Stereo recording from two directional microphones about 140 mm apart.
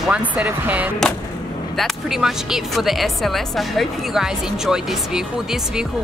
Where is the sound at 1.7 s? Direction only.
Centre (ahead or behind).